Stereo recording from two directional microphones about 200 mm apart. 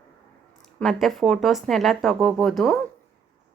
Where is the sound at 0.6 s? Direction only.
Centre (ahead or behind).